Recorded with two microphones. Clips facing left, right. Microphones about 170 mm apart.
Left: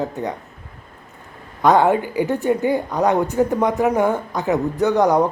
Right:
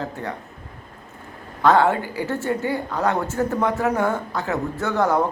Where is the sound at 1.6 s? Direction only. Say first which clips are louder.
Left 2 dB; 15° left (ahead or behind).